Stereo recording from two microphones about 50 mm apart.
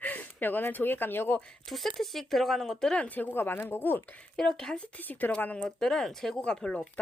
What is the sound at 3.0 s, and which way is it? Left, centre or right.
Speech, left.